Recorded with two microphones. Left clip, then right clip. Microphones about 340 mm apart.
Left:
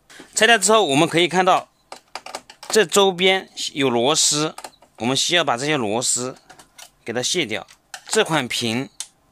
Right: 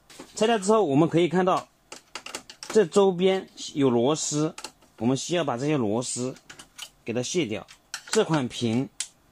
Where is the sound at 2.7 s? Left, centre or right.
Left.